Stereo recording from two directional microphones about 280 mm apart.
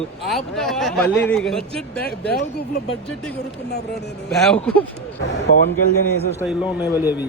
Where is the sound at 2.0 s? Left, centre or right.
Left.